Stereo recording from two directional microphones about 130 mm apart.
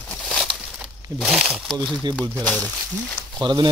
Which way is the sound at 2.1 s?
10° left (ahead or behind).